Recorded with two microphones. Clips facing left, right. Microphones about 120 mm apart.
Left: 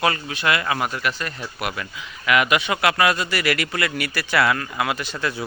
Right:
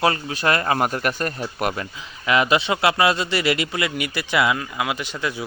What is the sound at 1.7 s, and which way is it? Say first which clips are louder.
Speech: right 1 dB; 30° right (ahead or behind).